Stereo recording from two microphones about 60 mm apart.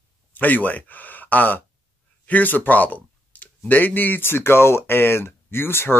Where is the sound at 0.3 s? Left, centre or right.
Left.